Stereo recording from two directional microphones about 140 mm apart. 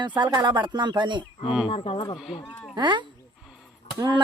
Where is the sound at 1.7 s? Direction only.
40° left (ahead or behind).